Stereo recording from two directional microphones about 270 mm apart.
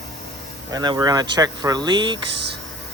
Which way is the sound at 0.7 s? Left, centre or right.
Centre.